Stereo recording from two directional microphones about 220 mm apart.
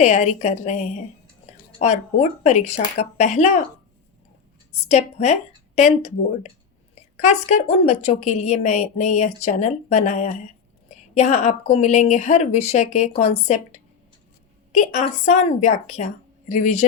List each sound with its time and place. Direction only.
0.0 s a woman's voice: 30° left (ahead or behind)
4.9 s a woman's voice: 30° left (ahead or behind)
6.9 s a woman's voice: 30° left (ahead or behind)